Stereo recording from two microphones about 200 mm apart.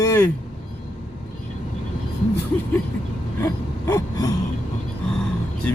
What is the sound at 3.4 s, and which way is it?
Gasp, 15° left (ahead or behind).